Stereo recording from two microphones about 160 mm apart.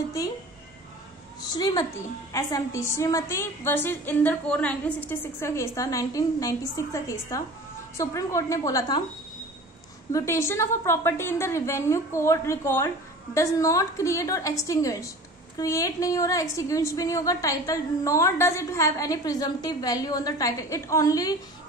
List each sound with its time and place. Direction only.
1.5 s a woman's voice: 25° left (ahead or behind)
10.1 s a woman's voice: 15° left (ahead or behind)